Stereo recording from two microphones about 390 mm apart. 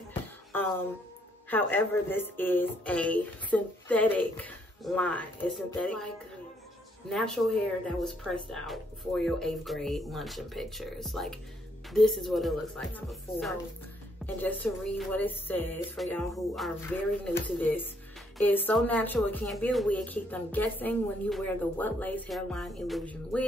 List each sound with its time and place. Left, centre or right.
0.1 s music: centre
1.5 s speech: centre
7.1 s speech: centre